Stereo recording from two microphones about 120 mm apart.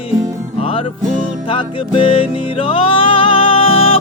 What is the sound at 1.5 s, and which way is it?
Music, 45° left (ahead or behind).